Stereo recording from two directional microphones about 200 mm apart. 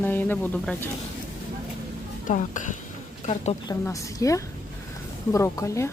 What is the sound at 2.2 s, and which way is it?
Speech, 40° left (ahead or behind).